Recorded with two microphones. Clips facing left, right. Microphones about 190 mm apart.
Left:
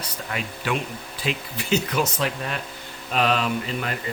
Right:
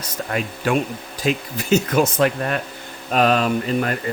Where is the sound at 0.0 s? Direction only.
45° right (ahead or behind).